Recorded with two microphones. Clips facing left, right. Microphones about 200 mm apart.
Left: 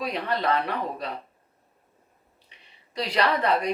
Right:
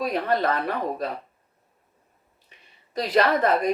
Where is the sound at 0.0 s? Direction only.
45° right (ahead or behind).